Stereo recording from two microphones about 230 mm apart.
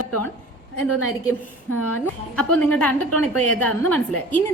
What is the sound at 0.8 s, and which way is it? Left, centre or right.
Speech, left.